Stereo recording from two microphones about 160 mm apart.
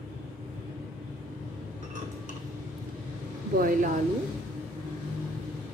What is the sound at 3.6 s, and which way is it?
Speech, 60° right (ahead or behind).